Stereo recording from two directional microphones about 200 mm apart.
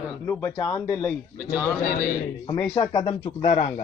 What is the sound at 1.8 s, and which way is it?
Speech, 45° left (ahead or behind).